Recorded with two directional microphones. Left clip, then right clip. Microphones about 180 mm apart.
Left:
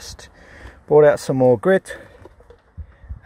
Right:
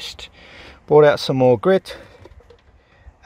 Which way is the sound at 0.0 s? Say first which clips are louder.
Right 6 dB; 15° right (ahead or behind).